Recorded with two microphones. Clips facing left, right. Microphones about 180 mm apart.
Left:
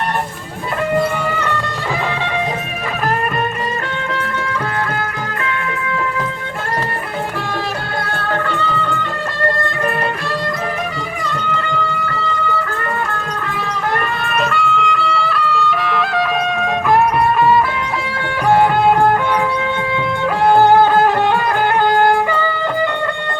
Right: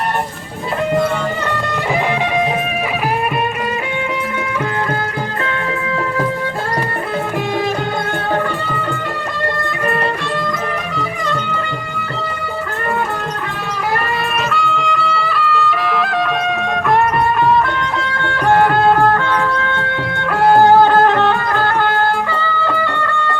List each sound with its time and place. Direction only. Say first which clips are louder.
14.3 s music: left 1 dB; centre (ahead or behind)
19.0 s music: even; 15° left (ahead or behind)